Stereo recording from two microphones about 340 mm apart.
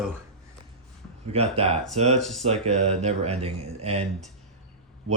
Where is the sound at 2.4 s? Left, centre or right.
Centre.